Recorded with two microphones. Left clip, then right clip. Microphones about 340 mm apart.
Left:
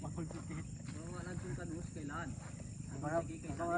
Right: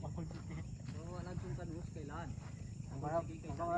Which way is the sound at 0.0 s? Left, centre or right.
Right.